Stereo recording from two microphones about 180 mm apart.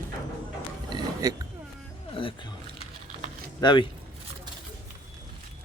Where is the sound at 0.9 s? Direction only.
25° right (ahead or behind).